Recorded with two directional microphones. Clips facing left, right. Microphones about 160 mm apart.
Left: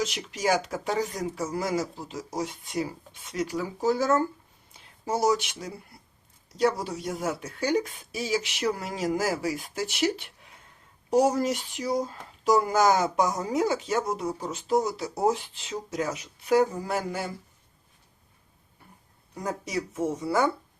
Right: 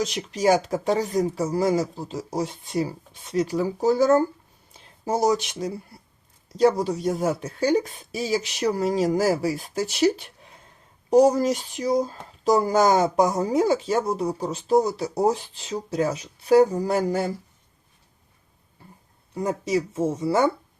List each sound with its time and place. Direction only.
0.0 s speech: 35° right (ahead or behind)
19.3 s speech: 25° right (ahead or behind)